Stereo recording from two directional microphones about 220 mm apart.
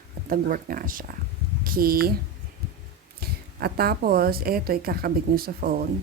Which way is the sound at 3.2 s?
45° right (ahead or behind).